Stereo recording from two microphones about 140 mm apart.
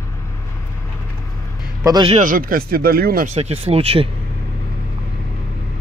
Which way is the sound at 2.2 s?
85° right.